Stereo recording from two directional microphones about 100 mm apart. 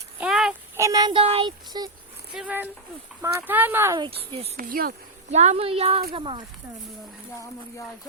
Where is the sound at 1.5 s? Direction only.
45° right (ahead or behind).